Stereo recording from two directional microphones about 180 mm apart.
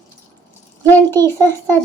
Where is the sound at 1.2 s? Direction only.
20° right (ahead or behind).